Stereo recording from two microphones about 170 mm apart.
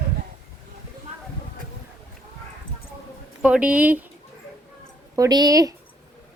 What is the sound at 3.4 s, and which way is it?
Speech, 5° right (ahead or behind).